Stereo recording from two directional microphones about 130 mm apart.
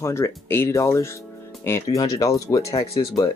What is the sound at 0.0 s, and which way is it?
Speech, 20° left (ahead or behind).